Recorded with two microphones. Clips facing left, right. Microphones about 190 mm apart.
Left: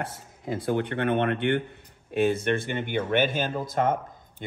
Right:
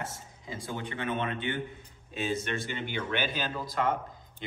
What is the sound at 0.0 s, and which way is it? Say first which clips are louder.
A man's voice: left 6 dB; 60° left (ahead or behind).